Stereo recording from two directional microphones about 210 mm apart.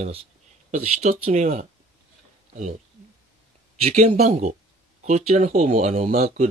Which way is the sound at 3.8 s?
30° right (ahead or behind).